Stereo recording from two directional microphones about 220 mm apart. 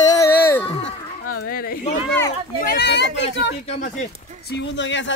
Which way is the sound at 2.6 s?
45° left (ahead or behind).